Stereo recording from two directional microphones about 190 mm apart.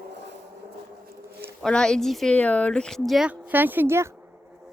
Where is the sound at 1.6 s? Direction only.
5° left (ahead or behind).